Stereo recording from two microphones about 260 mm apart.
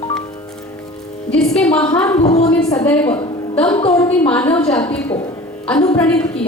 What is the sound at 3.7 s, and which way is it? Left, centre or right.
Speech, centre.